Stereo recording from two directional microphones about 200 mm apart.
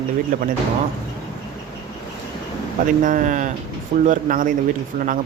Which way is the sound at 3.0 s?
40° right (ahead or behind).